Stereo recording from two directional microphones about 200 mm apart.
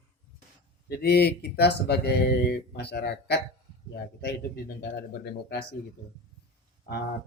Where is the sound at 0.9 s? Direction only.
55° left (ahead or behind).